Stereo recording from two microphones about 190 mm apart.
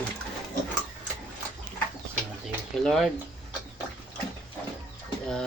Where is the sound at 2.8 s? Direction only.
Centre (ahead or behind).